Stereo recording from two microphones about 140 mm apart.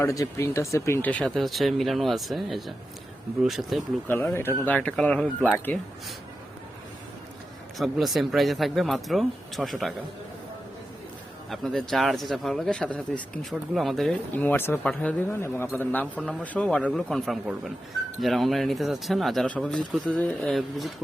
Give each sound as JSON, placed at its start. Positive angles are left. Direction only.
{"t": 0.0, "sound": "speech", "side_deg": 25}
{"t": 4.1, "sound": "a man's voice", "side_deg": 15}
{"t": 7.8, "sound": "speech", "side_deg": 0}
{"t": 11.5, "sound": "speech", "side_deg": 0}
{"t": 14.3, "sound": "a man's voice", "side_deg": 15}